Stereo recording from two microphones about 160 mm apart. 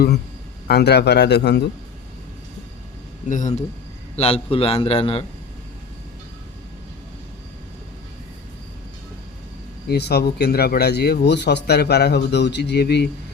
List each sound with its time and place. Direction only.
0.7 s a man's voice: 90° left
3.2 s speech: 55° left (ahead or behind)
4.2 s a man's voice: 35° left (ahead or behind)
9.9 s a man's voice: 90° left